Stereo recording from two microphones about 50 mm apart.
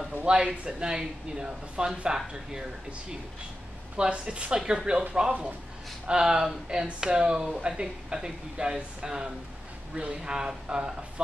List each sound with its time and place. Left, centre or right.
0.2 s speech: centre
3.9 s speech: right
6.0 s speech: centre